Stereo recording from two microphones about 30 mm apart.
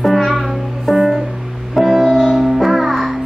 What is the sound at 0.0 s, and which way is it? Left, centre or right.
Music, centre.